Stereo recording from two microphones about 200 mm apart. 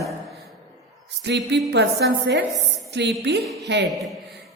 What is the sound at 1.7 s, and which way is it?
A woman's voice, 60° right (ahead or behind).